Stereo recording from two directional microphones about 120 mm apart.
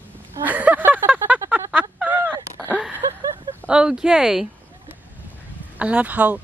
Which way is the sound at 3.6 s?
5° right (ahead or behind).